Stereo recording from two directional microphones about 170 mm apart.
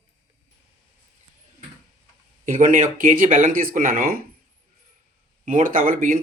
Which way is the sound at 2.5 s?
50° right (ahead or behind).